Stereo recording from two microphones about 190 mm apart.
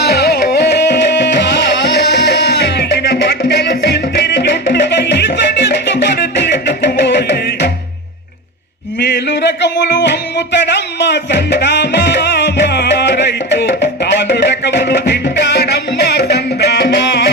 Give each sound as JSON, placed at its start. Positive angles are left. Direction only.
{"t": 0.0, "sound": "music", "side_deg": 60}
{"t": 9.0, "sound": "music", "side_deg": 65}